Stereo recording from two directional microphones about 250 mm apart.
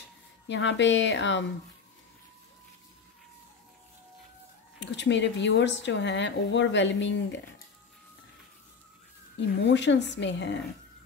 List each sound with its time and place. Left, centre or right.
0.5 s speech: left
4.7 s speech: left
9.6 s speech: left